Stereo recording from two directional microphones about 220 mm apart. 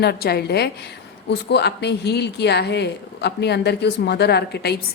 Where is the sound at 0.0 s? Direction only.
45° left (ahead or behind).